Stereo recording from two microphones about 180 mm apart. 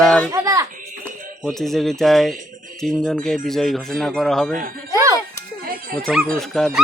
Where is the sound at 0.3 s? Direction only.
15° right (ahead or behind).